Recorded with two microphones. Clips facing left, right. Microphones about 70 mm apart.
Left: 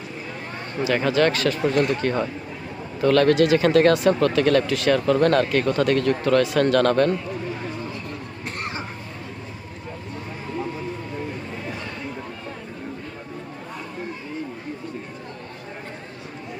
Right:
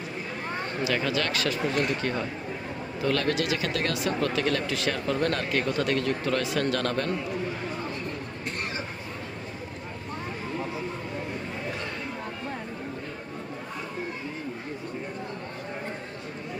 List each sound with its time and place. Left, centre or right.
0.9 s speech: left
4.2 s speech: left